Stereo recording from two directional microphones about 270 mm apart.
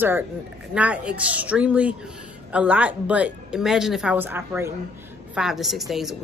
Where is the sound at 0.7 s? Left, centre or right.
Centre.